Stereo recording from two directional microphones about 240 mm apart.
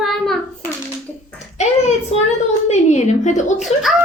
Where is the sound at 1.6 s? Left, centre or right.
Left.